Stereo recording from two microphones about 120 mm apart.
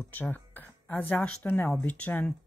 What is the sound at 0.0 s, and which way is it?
Speech, 15° left (ahead or behind).